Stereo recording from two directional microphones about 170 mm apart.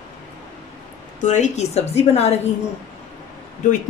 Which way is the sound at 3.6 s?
45° left (ahead or behind).